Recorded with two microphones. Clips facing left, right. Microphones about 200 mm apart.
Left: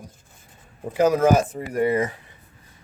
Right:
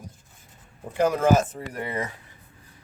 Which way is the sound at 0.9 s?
10° left (ahead or behind).